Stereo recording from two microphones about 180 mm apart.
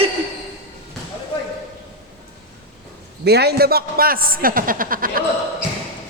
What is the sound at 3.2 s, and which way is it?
A man's voice, 65° right (ahead or behind).